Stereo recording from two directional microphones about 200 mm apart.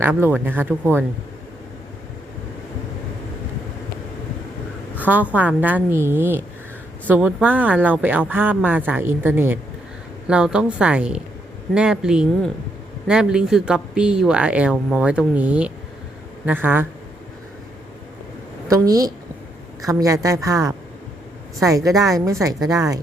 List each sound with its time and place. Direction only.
0.0 s speech: 10° right (ahead or behind)
4.9 s a sound: 10° right (ahead or behind)
5.3 s speech: 5° right (ahead or behind)
18.7 s speech: 15° right (ahead or behind)
21.8 s speech: 15° right (ahead or behind)